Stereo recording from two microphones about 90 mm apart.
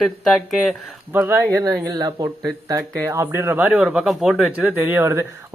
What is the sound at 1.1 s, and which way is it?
Speech, 25° right (ahead or behind).